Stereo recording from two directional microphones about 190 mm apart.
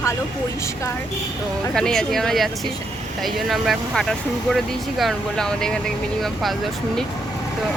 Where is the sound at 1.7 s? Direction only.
5° left (ahead or behind).